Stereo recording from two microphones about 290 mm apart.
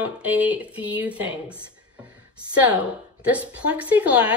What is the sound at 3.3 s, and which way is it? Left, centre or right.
Speech, centre.